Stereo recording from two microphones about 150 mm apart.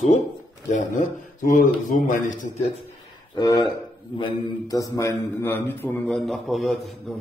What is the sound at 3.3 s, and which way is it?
Speech, 25° left (ahead or behind).